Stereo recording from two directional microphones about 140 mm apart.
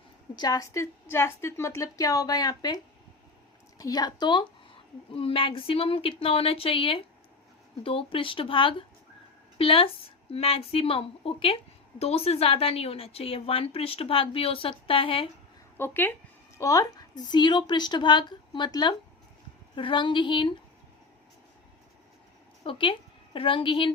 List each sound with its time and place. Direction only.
0.3 s a woman's voice: 25° left (ahead or behind)
15.8 s a woman's voice: 15° left (ahead or behind); by 20.5 s 35° left (ahead or behind)
22.6 s a woman's voice: 40° left (ahead or behind)